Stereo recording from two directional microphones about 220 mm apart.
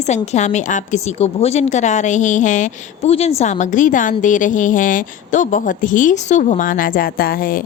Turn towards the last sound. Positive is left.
turn(degrees=40)  # may be behind; listen again after turning